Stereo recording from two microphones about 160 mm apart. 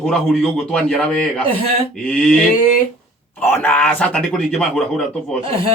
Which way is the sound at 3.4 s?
15° left (ahead or behind).